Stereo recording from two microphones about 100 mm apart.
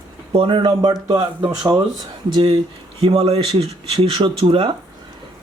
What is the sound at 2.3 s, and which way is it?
Speech, 60° right (ahead or behind).